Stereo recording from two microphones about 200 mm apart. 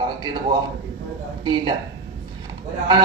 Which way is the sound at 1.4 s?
20° right (ahead or behind).